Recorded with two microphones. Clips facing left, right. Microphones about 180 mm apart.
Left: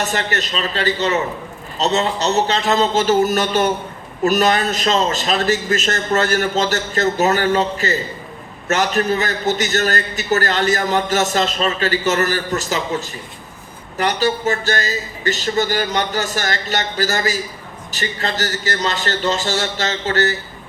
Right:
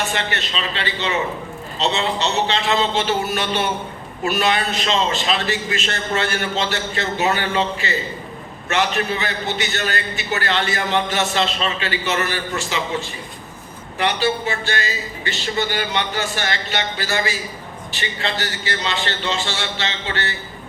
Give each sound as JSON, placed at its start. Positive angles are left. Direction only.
{"t": 0.0, "sound": "a man's voice", "side_deg": 40}